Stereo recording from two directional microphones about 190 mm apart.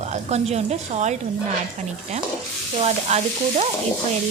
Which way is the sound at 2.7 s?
35° right (ahead or behind).